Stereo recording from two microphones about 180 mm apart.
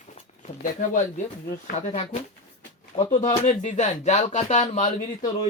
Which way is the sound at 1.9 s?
40° left (ahead or behind).